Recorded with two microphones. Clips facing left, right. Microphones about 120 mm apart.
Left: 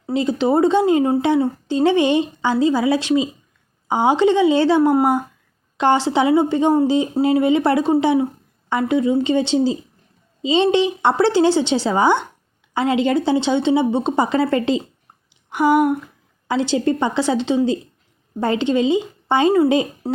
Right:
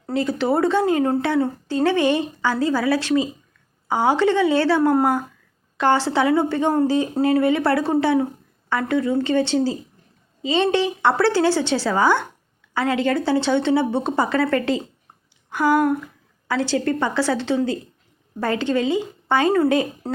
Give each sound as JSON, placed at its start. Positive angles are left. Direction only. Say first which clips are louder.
{"t": 0.0, "sound": "a woman's voice", "louder": "left 3 dB", "side_deg": 20}